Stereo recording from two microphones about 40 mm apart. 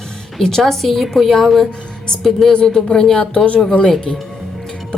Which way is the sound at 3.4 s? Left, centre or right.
Left.